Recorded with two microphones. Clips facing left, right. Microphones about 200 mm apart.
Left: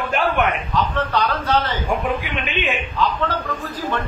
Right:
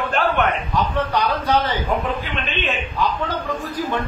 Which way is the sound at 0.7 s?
15° right (ahead or behind).